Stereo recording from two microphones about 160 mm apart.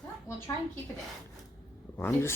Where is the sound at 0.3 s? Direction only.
20° left (ahead or behind).